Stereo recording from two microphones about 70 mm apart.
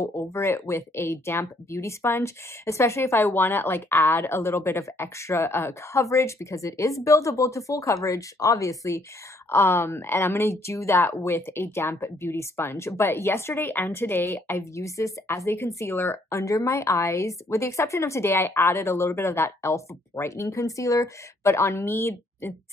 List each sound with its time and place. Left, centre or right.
0.0 s speech: left
9.5 s a woman's voice: left